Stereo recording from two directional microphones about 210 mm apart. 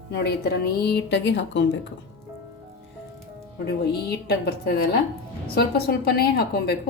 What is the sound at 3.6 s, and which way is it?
A woman's voice, 50° left (ahead or behind).